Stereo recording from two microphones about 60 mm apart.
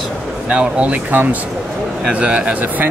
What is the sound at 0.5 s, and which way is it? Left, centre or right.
Speech, right.